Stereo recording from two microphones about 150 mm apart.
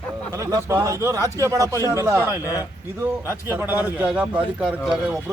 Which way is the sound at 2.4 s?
25° left (ahead or behind).